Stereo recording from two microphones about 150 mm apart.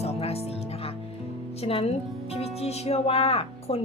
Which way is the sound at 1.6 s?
40° left (ahead or behind).